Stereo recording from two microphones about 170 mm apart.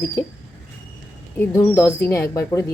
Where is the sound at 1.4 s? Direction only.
10° left (ahead or behind).